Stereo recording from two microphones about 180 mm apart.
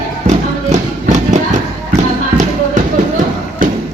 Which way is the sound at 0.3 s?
40° right (ahead or behind).